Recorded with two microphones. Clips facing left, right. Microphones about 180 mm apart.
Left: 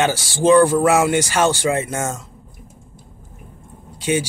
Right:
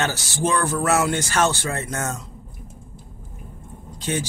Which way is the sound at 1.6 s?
90° left.